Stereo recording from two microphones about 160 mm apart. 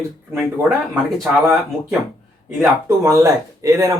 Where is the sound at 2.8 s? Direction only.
20° right (ahead or behind).